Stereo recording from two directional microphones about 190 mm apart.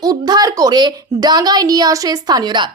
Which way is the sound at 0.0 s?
20° right (ahead or behind).